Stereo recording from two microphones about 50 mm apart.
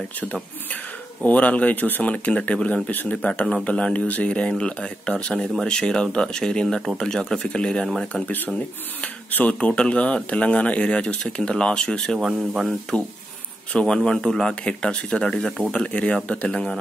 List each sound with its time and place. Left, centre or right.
1.2 s speech: left
3.2 s speech: centre
8.1 s speech: left; by 14.5 s centre
14.5 s speech: left